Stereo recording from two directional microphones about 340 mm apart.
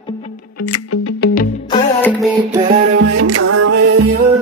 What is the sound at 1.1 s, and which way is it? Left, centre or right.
Music, left.